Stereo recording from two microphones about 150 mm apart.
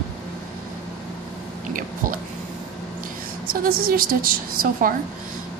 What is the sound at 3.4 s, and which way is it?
A woman's voice, 80° right.